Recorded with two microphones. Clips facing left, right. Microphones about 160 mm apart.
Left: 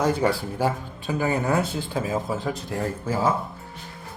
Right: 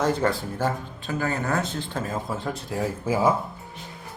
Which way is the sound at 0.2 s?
10° left (ahead or behind).